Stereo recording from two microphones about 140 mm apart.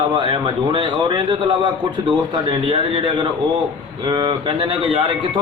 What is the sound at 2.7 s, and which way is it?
Speech, 35° right (ahead or behind).